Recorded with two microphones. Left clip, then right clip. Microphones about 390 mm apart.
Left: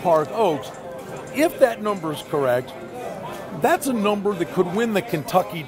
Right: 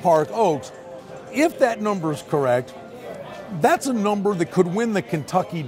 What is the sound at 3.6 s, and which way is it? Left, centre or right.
Speech, right.